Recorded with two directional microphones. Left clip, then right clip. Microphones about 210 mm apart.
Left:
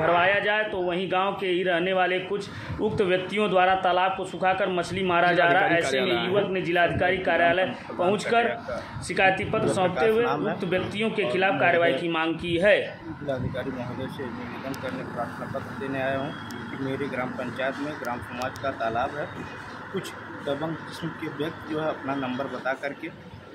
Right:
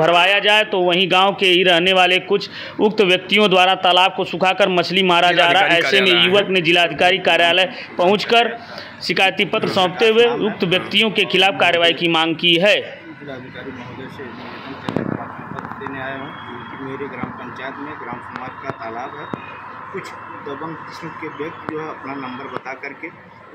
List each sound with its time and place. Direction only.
0.0 s a man's voice: 40° right (ahead or behind)
5.9 s a man's voice: centre (ahead or behind)
6.5 s a man's voice: 40° right (ahead or behind)